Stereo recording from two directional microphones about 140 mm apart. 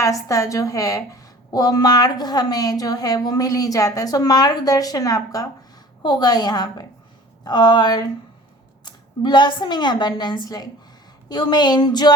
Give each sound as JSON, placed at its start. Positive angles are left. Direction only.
{"t": 0.0, "sound": "a woman's voice", "side_deg": 25}